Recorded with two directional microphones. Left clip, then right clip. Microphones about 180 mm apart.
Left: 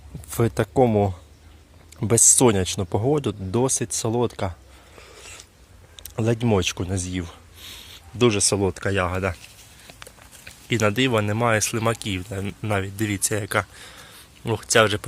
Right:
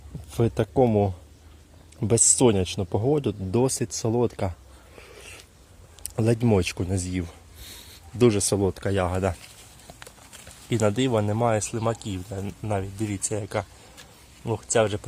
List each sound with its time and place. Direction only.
0.3 s speech: 5° right (ahead or behind)
4.9 s biting: 20° right (ahead or behind)
6.0 s speech: 20° right (ahead or behind)
10.7 s speech: 10° right (ahead or behind)